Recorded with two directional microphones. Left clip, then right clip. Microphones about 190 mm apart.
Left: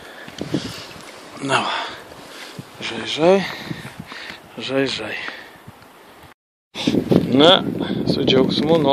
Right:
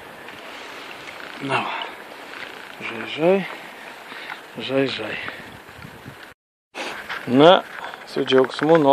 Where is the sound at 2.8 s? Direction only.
35° left (ahead or behind).